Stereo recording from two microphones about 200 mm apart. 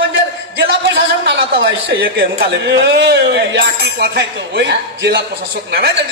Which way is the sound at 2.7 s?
55° right (ahead or behind).